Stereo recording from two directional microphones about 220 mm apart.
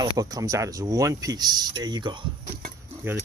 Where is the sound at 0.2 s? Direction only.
15° right (ahead or behind).